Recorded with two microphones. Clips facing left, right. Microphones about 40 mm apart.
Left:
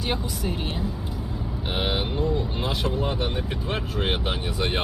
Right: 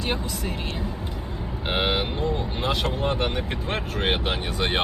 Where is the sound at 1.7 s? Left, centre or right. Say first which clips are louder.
Right 2 dB; right.